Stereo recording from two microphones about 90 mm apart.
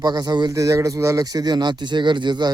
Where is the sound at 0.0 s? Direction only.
50° right (ahead or behind).